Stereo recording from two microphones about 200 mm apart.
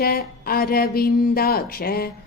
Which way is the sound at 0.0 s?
50° left (ahead or behind).